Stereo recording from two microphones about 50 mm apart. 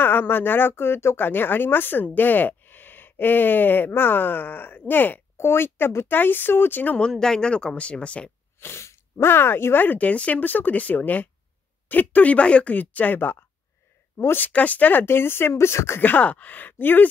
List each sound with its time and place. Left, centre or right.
0.0 s speech: left
5.4 s speech: left
7.0 s speech: centre
8.5 s speech: left
9.9 s speech: left
12.7 s speech: left
14.3 s speech: left
15.0 s speech: left
15.5 s speech: left
16.0 s speech: left